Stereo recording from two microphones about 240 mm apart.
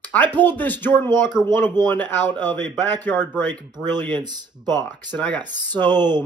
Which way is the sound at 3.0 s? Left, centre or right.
Centre.